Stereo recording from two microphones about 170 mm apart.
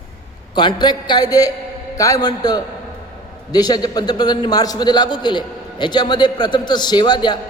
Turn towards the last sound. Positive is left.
turn(degrees=25)  # may be behind; listen again after turning